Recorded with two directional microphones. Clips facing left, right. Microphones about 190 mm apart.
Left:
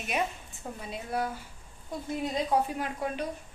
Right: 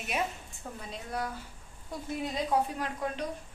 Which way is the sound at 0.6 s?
10° left (ahead or behind).